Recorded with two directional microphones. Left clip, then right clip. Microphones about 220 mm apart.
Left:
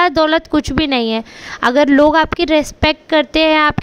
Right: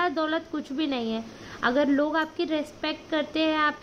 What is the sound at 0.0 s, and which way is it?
Speech, 45° left (ahead or behind).